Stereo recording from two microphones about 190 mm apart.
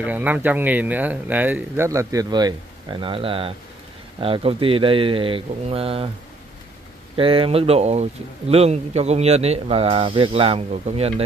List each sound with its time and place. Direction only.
0.0 s speech: 10° right (ahead or behind); by 6.0 s 30° right (ahead or behind)
7.2 s speech: 30° right (ahead or behind)